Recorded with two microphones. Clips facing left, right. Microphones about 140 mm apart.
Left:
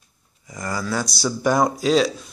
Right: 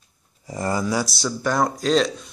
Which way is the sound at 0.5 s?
25° right (ahead or behind).